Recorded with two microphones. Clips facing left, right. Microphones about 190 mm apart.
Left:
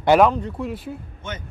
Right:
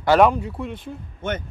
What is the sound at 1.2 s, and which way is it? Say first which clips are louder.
Speech: right 7 dB; 60° right (ahead or behind).